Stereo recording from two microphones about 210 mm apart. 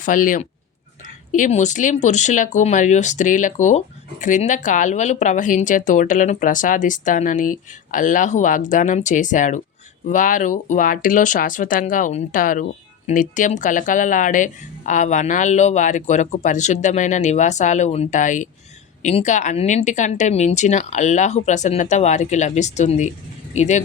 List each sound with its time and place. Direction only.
0.0 s speech: 40° left (ahead or behind)